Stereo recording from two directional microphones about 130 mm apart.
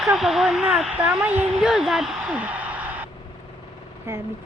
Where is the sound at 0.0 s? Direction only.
Centre (ahead or behind).